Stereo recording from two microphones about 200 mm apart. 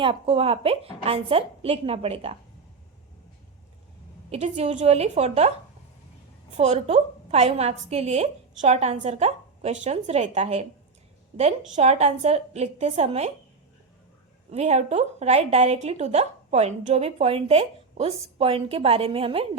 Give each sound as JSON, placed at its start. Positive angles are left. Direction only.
{"t": 0.0, "sound": "a woman's voice", "side_deg": -25}
{"t": 4.3, "sound": "a woman's voice", "side_deg": -35}
{"t": 6.6, "sound": "a woman's voice", "side_deg": -35}
{"t": 14.5, "sound": "a woman's voice", "side_deg": -35}